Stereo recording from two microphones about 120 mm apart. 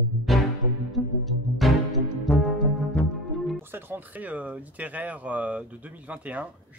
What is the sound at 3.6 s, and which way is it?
Speech, 20° right (ahead or behind).